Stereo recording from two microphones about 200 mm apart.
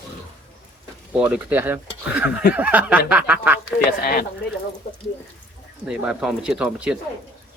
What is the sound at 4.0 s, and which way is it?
Speech, 50° left (ahead or behind).